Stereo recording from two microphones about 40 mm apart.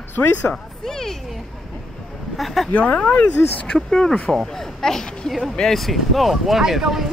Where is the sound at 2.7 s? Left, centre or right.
Left.